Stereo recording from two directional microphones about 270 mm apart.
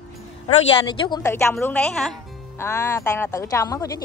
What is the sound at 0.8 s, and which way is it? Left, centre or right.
Speech, centre.